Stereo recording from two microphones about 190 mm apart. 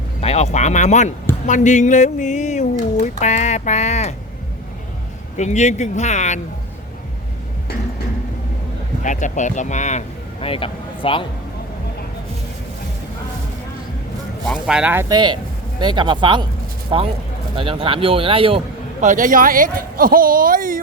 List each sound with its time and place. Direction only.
0.2 s speech: 35° left (ahead or behind)
5.4 s speech: 35° left (ahead or behind)
9.0 s speech: 40° left (ahead or behind)
14.4 s speech: centre (ahead or behind)
15.1 s a man's voice: 25° right (ahead or behind); by 20.7 s 45° right (ahead or behind)